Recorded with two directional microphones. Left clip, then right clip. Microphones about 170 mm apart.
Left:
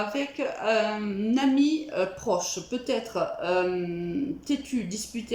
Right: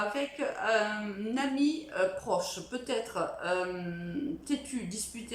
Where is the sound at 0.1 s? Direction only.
20° left (ahead or behind).